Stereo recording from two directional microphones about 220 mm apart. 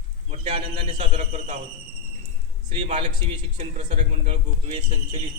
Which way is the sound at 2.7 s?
25° right (ahead or behind).